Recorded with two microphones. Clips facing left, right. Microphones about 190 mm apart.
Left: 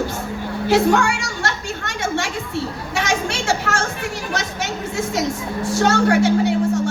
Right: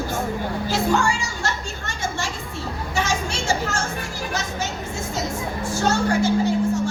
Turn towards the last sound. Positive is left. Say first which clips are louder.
# left 2 dB
turn(degrees=70)  # may be behind; listen again after turning